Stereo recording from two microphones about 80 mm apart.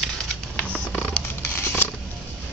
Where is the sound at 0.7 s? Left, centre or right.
Centre.